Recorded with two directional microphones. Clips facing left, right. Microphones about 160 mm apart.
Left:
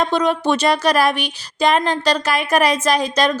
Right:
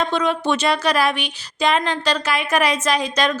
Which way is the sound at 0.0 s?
40° left (ahead or behind).